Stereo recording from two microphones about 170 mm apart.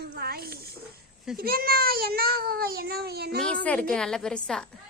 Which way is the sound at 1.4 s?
60° right (ahead or behind).